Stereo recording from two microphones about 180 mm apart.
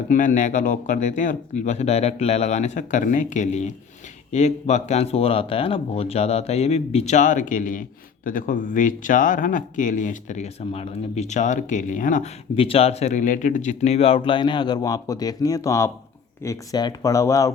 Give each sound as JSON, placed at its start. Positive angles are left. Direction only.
{"t": 0.1, "sound": "speech", "side_deg": 45}
{"t": 12.5, "sound": "speech", "side_deg": 30}